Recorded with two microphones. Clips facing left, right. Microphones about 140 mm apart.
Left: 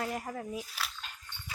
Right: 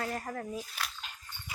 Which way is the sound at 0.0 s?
10° left (ahead or behind).